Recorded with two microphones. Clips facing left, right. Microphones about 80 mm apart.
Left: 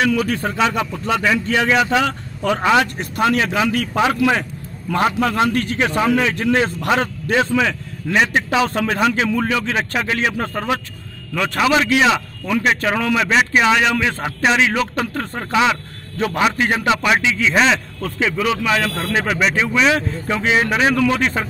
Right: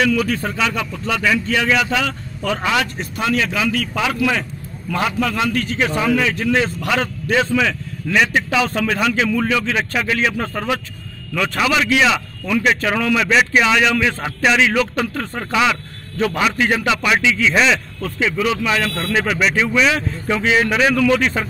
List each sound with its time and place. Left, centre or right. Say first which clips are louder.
0.0 s a man's voice: even; left
3.0 s a man's voice: left 2 dB; left
6.9 s a man's voice: left 1 dB; left